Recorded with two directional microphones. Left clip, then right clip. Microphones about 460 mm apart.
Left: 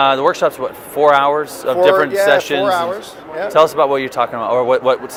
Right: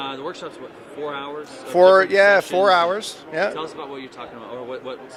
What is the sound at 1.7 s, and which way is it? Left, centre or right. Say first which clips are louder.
Speech: even; right.